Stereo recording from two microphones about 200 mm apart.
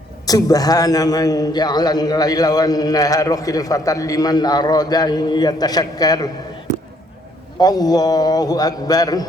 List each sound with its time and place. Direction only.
0.3 s a man's voice: 20° left (ahead or behind)
7.6 s a man's voice: 20° left (ahead or behind)